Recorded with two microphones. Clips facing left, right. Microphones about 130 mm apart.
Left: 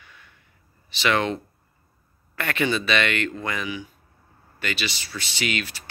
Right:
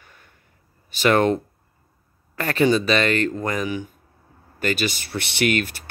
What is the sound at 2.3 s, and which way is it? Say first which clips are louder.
Speech: right 6 dB; 35° right (ahead or behind).